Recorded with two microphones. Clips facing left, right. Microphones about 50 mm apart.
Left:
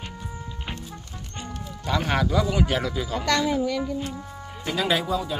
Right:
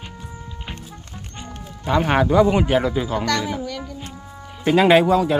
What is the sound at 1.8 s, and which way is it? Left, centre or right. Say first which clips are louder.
Speech: right 6 dB; right.